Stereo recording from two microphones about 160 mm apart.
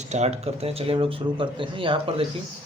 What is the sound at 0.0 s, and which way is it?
Speech, 45° right (ahead or behind).